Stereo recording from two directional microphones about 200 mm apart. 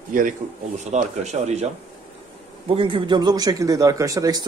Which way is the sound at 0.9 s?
35° right (ahead or behind).